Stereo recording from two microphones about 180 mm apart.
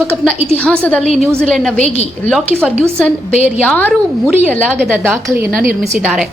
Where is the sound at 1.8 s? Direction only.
35° left (ahead or behind).